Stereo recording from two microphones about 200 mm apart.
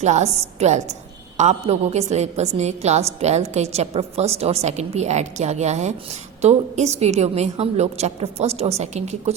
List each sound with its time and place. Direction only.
0.0 s a woman's voice: 35° right (ahead or behind)